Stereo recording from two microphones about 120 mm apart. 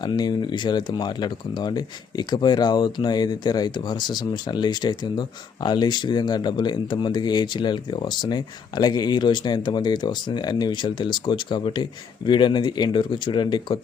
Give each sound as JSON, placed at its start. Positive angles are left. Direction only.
{"t": 0.0, "sound": "speech", "side_deg": 35}